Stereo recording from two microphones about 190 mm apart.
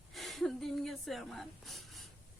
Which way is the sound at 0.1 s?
Centre (ahead or behind).